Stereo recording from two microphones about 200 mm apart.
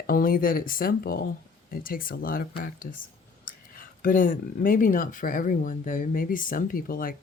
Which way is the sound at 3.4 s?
45° left (ahead or behind).